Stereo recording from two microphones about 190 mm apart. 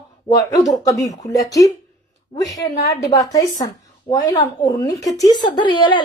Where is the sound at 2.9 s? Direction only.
20° left (ahead or behind).